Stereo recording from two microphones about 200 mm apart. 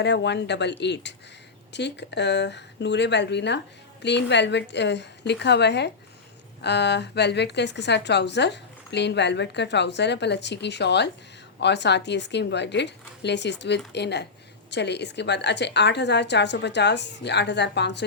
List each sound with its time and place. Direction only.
0.0 s a woman's voice: 60° left (ahead or behind)